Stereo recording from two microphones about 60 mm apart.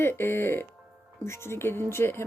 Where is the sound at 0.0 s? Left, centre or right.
Left.